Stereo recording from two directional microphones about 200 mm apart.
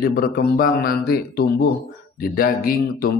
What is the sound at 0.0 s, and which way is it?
Speech, 45° left (ahead or behind).